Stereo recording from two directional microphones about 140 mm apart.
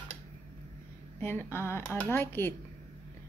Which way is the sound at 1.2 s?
15° left (ahead or behind).